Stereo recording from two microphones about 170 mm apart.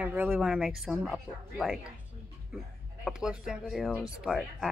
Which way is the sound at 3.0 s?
5° right (ahead or behind).